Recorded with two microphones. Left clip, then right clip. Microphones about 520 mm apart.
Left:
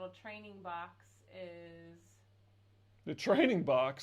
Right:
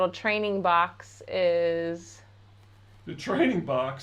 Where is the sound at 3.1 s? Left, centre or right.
Left.